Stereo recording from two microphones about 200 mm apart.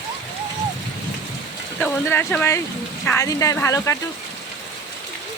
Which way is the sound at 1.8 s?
10° left (ahead or behind).